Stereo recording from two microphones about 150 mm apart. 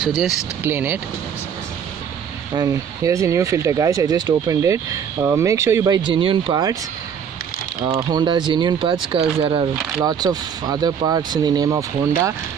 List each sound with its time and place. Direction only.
0.0 s speech: centre (ahead or behind)
0.7 s speech: 10° right (ahead or behind)
2.5 s speech: 25° right (ahead or behind)
7.9 s speech: 25° right (ahead or behind)